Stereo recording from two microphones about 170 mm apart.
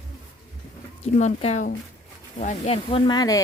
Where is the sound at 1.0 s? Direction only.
40° left (ahead or behind).